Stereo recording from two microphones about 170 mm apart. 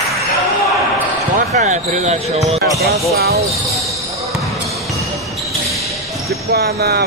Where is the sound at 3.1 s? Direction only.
65° right (ahead or behind).